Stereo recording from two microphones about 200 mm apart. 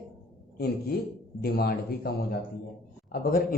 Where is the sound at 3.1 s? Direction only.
45° left (ahead or behind).